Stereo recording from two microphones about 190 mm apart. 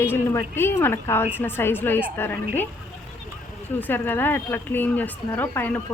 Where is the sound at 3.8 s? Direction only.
10° left (ahead or behind).